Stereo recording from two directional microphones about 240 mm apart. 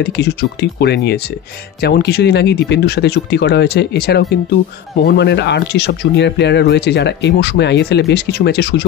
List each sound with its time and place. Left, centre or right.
0.2 s speech: left